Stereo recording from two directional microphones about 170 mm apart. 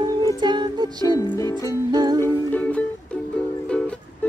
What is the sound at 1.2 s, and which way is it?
Music, 25° left (ahead or behind).